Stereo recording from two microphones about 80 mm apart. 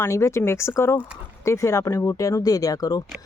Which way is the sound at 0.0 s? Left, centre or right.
Left.